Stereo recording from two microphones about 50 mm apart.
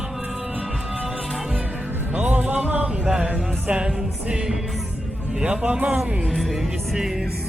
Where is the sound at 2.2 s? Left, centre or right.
Right.